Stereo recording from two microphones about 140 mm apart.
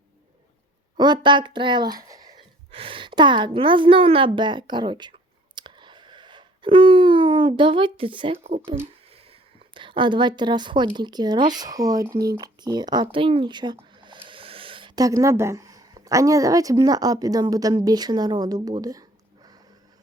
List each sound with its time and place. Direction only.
0.9 s a woman's voice: 30° right (ahead or behind)
2.7 s a woman's voice: 40° right (ahead or behind)
5.5 s a sound: 35° right (ahead or behind)
10.9 s a woman's voice: 30° right (ahead or behind)